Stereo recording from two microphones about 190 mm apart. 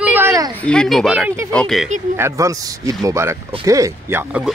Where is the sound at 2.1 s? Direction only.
15° right (ahead or behind).